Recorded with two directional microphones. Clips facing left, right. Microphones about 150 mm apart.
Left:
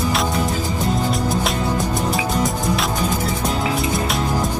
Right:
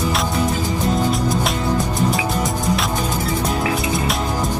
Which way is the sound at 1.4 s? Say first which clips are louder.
Right 1 dB; centre (ahead or behind).